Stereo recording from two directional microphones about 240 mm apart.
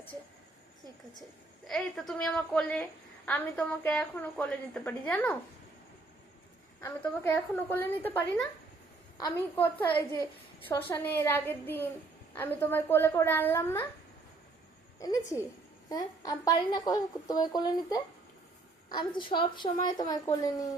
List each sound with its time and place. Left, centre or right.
1.6 s a woman's voice: centre
6.8 s a woman's voice: centre
14.9 s a woman's voice: centre